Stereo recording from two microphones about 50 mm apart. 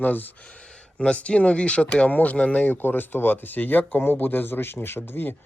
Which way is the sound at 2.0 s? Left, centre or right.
Left.